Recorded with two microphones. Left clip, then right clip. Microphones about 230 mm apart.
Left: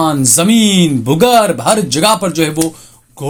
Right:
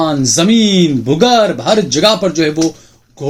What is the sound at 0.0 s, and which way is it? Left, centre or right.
Speech, left.